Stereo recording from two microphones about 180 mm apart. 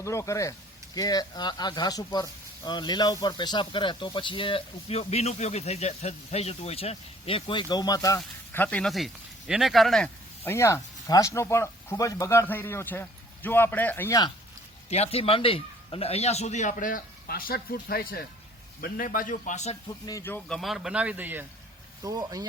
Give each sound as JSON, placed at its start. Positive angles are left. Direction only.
{"t": 0.0, "sound": "speech", "side_deg": 15}
{"t": 10.5, "sound": "speech", "side_deg": 15}
{"t": 14.8, "sound": "a man's voice", "side_deg": 35}
{"t": 20.1, "sound": "speech", "side_deg": 15}
{"t": 20.6, "sound": "a man's voice", "side_deg": 0}
{"t": 22.0, "sound": "speech", "side_deg": -20}